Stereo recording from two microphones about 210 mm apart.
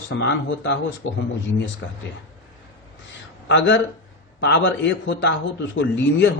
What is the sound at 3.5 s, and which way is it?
A man's voice, 60° left (ahead or behind).